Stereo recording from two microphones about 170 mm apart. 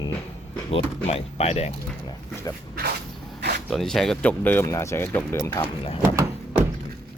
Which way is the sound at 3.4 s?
80° right.